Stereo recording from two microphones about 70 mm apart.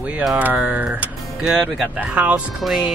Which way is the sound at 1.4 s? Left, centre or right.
Centre.